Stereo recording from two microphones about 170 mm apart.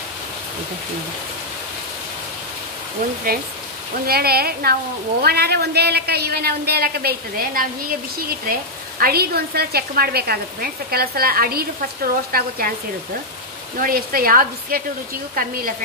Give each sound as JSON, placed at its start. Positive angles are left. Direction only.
{"t": 4.0, "sound": "frying", "side_deg": -65}
{"t": 5.2, "sound": "a man's voice", "side_deg": -65}
{"t": 9.0, "sound": "frying", "side_deg": -65}
{"t": 13.7, "sound": "frying", "side_deg": -60}